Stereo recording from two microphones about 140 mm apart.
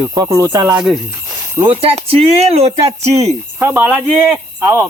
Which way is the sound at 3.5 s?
10° right (ahead or behind).